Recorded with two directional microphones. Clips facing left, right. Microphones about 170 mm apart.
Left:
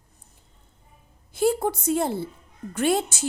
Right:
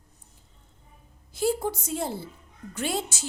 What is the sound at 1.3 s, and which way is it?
A woman's voice, 60° left (ahead or behind).